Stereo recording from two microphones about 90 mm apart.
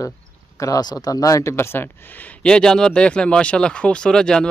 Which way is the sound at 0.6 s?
45° left (ahead or behind).